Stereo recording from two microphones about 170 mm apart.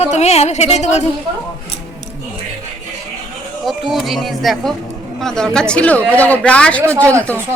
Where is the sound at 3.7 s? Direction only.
Centre (ahead or behind).